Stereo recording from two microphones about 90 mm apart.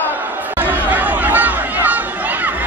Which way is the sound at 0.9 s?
20° right (ahead or behind).